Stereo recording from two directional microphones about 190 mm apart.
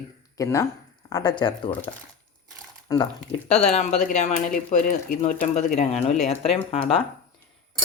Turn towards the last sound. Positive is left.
turn(degrees=30)  # may be behind; listen again after turning